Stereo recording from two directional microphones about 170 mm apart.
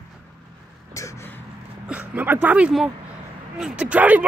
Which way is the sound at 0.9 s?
15° left (ahead or behind).